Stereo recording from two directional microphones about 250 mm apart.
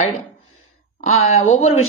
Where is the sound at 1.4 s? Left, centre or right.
Left.